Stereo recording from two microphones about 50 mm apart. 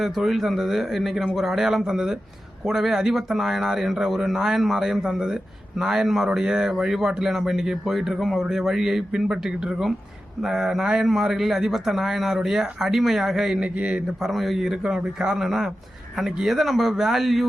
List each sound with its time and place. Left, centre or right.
0.0 s a man's voice: centre
13.6 s a man's voice: right
14.2 s a man's voice: centre